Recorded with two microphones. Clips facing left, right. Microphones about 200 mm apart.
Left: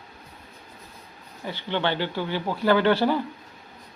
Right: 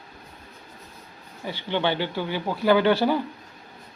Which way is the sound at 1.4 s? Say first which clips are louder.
Right 1 dB; 15° right (ahead or behind).